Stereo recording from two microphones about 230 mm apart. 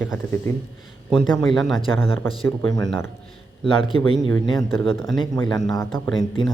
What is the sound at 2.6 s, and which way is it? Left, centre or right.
A man's voice, centre.